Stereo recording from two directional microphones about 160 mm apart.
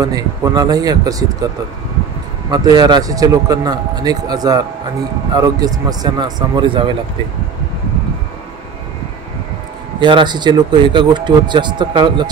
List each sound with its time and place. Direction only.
0.0 s speech: 20° right (ahead or behind)
2.5 s speech: 25° right (ahead or behind)
9.9 s speech: 30° right (ahead or behind)